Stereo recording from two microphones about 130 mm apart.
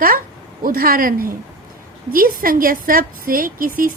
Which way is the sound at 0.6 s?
90° right.